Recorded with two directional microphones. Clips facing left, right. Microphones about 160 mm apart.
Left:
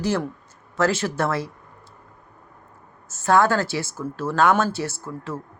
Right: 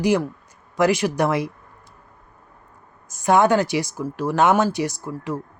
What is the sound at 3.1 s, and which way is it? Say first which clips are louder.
Speech: right 2 dB; 15° right (ahead or behind).